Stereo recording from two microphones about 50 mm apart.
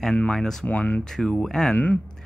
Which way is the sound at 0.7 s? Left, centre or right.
Left.